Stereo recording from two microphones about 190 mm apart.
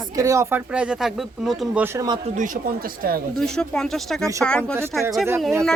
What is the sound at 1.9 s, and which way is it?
Speech, 20° right (ahead or behind).